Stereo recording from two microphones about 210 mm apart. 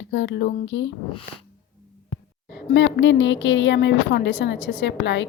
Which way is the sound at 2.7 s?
55° left (ahead or behind).